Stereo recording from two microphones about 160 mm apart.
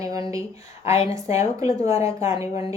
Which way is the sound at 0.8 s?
40° left (ahead or behind).